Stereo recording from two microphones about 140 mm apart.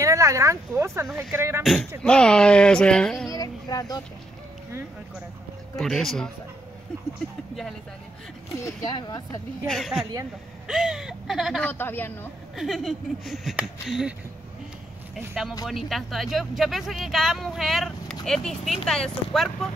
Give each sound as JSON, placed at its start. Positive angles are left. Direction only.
{"t": 0.0, "sound": "speech", "side_deg": -25}
{"t": 1.6, "sound": "speech", "side_deg": 0}
{"t": 3.3, "sound": "speech", "side_deg": 25}
{"t": 5.8, "sound": "speech", "side_deg": 0}
{"t": 8.5, "sound": "speech", "side_deg": 20}
{"t": 9.7, "sound": "speech", "side_deg": 0}
{"t": 11.6, "sound": "speech", "side_deg": 15}
{"t": 12.5, "sound": "speech", "side_deg": 0}
{"t": 15.1, "sound": "speech", "side_deg": 0}